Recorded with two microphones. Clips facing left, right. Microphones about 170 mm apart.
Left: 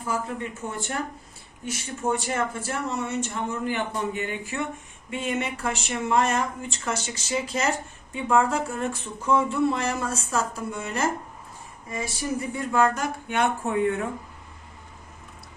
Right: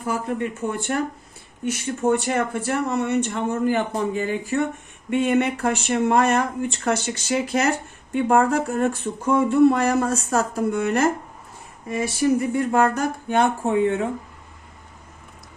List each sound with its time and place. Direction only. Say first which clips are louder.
0.1 s speech: right 5 dB; 60° right (ahead or behind); by 4.6 s 35° right (ahead or behind)
5.1 s speech: right 9 dB; 60° right (ahead or behind)
12.2 s speech: right 10 dB; 60° right (ahead or behind)
12.7 s a sound: left 1 dB; 50° right (ahead or behind)
13.3 s speech: right 5 dB; 30° right (ahead or behind)